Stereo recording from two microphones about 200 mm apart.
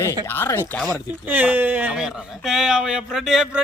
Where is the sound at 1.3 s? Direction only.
10° right (ahead or behind).